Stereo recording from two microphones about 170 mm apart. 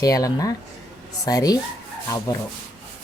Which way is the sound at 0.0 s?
20° left (ahead or behind).